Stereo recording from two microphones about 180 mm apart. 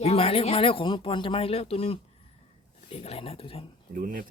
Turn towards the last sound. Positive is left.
turn(degrees=-50)  # may be behind; listen again after turning